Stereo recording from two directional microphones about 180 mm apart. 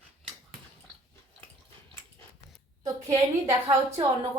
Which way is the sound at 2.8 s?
20° right (ahead or behind).